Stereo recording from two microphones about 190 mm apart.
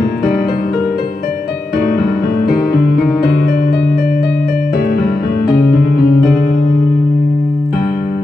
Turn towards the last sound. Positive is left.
turn(degrees=55)  # may be behind; listen again after turning